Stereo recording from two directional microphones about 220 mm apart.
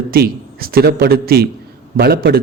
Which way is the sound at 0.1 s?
45° right (ahead or behind).